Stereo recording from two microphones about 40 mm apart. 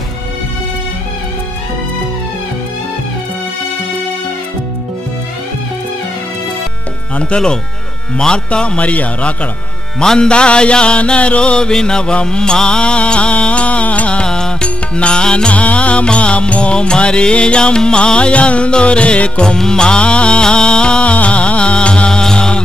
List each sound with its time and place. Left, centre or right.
7.2 s music: left
8.5 s a man's voice: left
9.9 s music: centre; by 14.2 s left
14.2 s music: centre
15.5 s music: left
22.2 s mantra: centre